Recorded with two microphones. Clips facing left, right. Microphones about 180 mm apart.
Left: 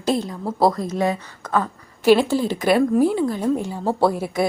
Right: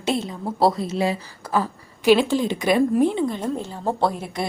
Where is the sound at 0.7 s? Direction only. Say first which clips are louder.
Left 1 dB; 25° right (ahead or behind).